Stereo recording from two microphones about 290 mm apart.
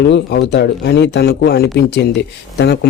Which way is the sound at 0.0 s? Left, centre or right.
Left.